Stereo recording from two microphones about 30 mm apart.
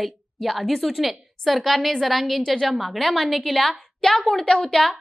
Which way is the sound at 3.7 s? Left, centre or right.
Centre.